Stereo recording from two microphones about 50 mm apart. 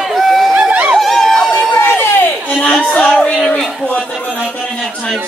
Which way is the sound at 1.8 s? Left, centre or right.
Left.